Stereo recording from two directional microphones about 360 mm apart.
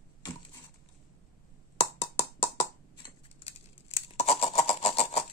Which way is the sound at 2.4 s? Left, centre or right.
Centre.